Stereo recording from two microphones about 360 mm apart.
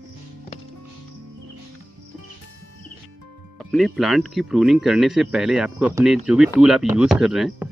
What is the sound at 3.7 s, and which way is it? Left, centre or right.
Speech, centre.